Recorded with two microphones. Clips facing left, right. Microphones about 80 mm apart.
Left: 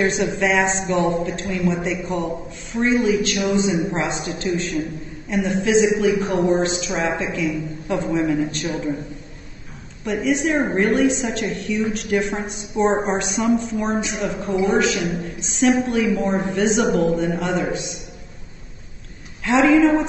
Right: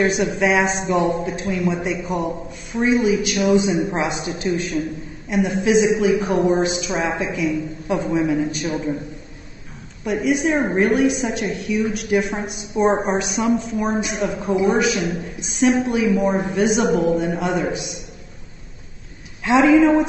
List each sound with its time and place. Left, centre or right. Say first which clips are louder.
0.0 s a woman's voice: right 1 dB; centre
5.3 s a woman's voice: right 1 dB; centre
10.0 s a woman's voice: right 1 dB; centre
19.4 s a woman's voice: right 1 dB; centre